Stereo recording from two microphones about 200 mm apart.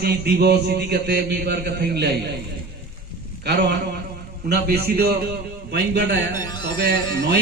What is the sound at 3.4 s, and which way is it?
A man's voice, 60° right (ahead or behind).